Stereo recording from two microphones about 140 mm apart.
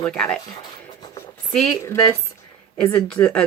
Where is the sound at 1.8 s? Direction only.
20° left (ahead or behind).